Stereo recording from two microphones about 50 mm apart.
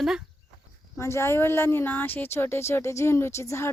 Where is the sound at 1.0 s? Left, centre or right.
Left.